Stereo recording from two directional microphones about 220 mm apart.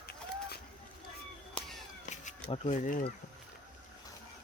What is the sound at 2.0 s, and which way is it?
Cat, 35° left (ahead or behind).